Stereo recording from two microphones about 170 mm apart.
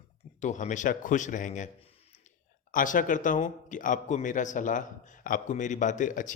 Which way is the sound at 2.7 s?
50° left (ahead or behind).